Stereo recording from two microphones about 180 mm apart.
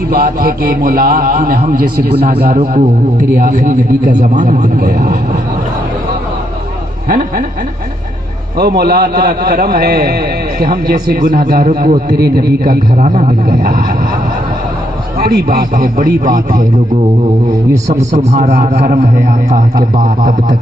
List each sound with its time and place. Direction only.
0.1 s a man's voice: 55° right (ahead or behind)
7.1 s a man's voice: 55° right (ahead or behind)
8.5 s a man's voice: 60° right (ahead or behind)
15.2 s a man's voice: 60° right (ahead or behind)
17.8 s a man's voice: 40° right (ahead or behind)